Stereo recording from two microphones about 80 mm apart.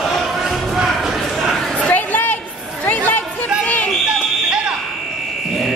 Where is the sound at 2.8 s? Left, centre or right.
Left.